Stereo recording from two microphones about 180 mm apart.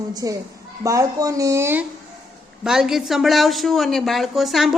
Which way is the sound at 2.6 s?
5° right (ahead or behind).